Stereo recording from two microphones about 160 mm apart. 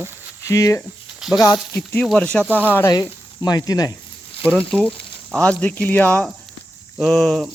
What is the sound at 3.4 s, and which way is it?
Speech, 25° left (ahead or behind).